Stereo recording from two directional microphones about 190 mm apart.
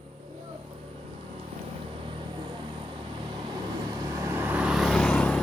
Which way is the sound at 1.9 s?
25° right (ahead or behind).